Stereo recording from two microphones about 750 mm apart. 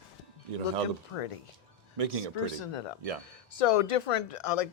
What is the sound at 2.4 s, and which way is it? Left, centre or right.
Speech, left.